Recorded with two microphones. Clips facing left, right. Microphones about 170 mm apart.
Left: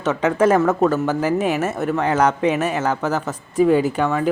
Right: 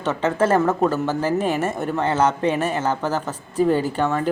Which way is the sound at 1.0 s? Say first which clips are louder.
Left 2 dB; 10° left (ahead or behind).